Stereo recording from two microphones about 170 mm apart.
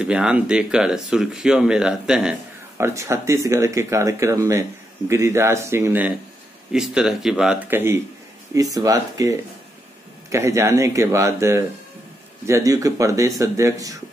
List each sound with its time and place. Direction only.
0.0 s speech: 5° right (ahead or behind)
2.8 s speech: 15° right (ahead or behind)